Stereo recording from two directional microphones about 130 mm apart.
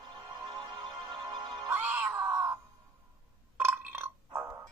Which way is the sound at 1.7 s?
15° right (ahead or behind).